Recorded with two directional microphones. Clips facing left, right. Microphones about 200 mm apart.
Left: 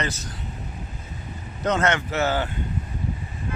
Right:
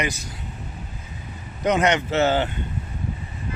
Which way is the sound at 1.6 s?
15° right (ahead or behind).